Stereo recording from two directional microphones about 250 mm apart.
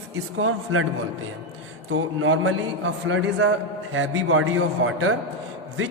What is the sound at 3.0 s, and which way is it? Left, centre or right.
A man's voice, right.